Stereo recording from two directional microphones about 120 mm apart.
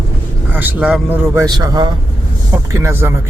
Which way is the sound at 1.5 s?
35° right (ahead or behind).